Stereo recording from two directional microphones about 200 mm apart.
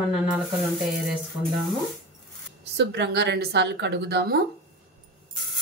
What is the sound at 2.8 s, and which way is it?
A woman's voice, 55° right (ahead or behind).